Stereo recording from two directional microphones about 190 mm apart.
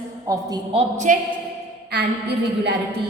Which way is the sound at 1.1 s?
45° right (ahead or behind).